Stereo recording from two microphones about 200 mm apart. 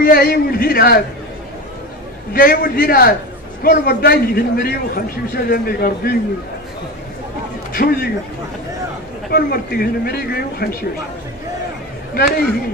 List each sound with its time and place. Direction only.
0.0 s a man's voice: 50° left (ahead or behind)
2.3 s a man's voice: 45° left (ahead or behind)
7.7 s a man's voice: 45° left (ahead or behind)
9.3 s a man's voice: 50° left (ahead or behind)